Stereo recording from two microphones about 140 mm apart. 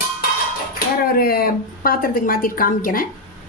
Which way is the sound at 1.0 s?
90° left.